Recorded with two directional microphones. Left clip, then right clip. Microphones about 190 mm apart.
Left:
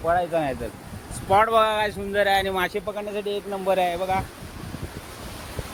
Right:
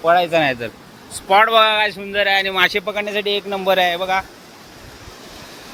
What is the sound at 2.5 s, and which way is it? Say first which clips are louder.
Speech: right 9 dB; centre (ahead or behind).